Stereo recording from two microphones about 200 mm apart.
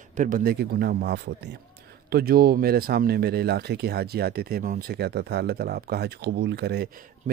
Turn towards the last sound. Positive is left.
turn(degrees=-55)  # may be behind; listen again after turning